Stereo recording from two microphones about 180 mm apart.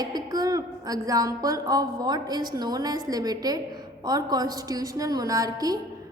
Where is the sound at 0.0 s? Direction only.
20° right (ahead or behind).